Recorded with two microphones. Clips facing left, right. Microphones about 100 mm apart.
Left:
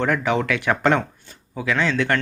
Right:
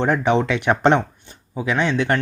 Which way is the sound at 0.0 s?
25° right (ahead or behind).